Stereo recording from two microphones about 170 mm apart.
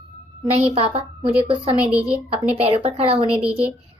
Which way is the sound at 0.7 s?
35° right (ahead or behind).